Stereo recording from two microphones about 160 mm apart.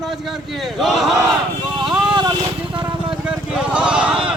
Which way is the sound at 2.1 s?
30° right (ahead or behind).